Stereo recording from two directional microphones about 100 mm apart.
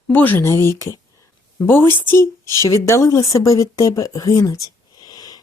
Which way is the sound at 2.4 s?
40° right (ahead or behind).